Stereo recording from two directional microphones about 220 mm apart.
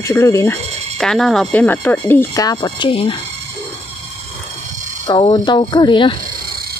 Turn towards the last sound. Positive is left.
turn(degrees=20)  # may be behind; listen again after turning